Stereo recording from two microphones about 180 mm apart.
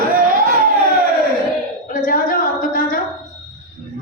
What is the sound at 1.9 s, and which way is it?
A woman's voice, 50° left (ahead or behind).